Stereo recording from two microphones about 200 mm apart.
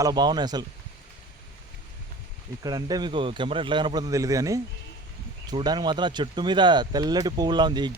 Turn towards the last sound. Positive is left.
turn(degrees=-20)  # may be behind; listen again after turning